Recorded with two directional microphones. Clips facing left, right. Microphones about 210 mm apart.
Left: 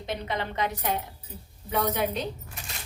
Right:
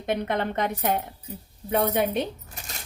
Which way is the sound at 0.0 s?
55° right (ahead or behind).